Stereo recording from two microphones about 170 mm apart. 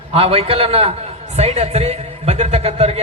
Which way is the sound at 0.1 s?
35° right (ahead or behind).